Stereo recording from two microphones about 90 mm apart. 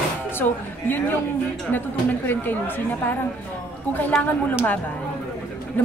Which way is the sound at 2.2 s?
20° left (ahead or behind).